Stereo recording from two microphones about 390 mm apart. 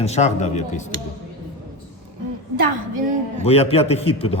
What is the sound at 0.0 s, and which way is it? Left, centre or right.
Speech, centre.